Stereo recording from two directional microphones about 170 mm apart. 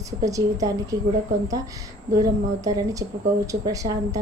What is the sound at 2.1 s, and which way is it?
A woman's voice, 20° right (ahead or behind).